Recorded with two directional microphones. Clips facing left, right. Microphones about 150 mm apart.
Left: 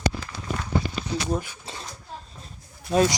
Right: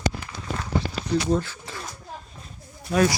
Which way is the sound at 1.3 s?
15° left (ahead or behind).